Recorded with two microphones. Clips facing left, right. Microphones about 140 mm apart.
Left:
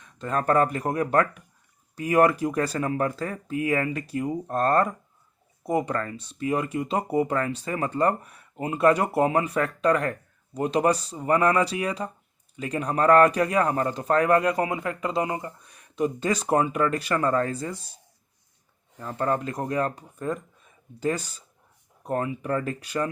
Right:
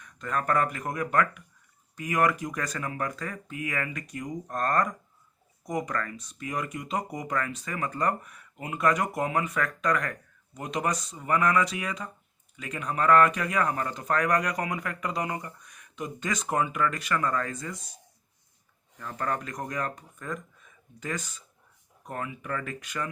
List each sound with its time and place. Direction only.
0.0 s speech: 30° left (ahead or behind)